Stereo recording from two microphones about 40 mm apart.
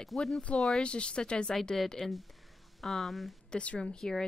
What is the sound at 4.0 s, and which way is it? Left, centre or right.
Speech, centre.